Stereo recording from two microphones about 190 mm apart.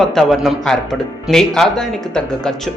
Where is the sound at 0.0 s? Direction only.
Centre (ahead or behind).